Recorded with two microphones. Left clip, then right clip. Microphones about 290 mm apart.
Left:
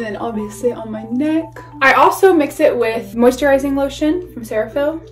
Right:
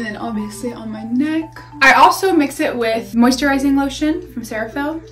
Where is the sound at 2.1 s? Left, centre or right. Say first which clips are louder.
Left 4 dB; left.